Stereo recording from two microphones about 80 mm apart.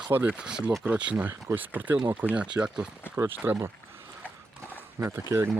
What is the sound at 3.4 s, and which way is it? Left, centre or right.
Speech, right.